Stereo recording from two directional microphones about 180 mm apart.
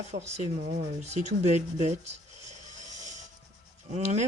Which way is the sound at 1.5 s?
40° right (ahead or behind).